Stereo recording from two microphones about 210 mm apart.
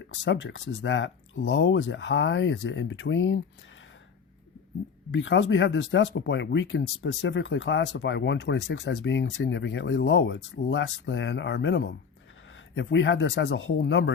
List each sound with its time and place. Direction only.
0.3 s speech: 60° left (ahead or behind)
5.1 s speech: 60° left (ahead or behind)